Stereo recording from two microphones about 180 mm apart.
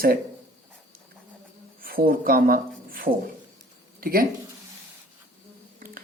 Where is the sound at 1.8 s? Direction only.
55° right (ahead or behind).